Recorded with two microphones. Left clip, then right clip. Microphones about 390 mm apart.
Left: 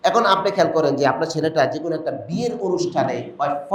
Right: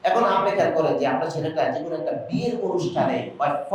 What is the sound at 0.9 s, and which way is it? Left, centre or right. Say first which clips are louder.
Speech: left 4 dB; left.